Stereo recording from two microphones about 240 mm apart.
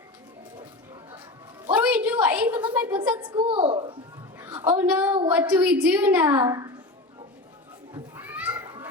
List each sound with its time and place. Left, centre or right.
1.6 s a woman's voice: centre
3.2 s a woman's voice: right
4.4 s a woman's voice: centre
7.9 s children playing: centre